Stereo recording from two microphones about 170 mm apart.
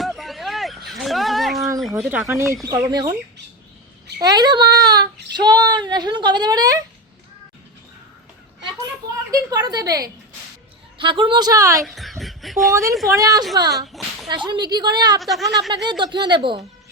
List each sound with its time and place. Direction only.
0.0 s a sound: centre (ahead or behind)
1.8 s speech: 5° right (ahead or behind); by 3.2 s 25° right (ahead or behind)
4.2 s speech: 25° right (ahead or behind)
9.3 s speech: 20° right (ahead or behind)
11.9 s speech: centre (ahead or behind)
13.1 s speech: 20° right (ahead or behind)
15.2 s speech: centre (ahead or behind)
15.7 s speech: 25° right (ahead or behind)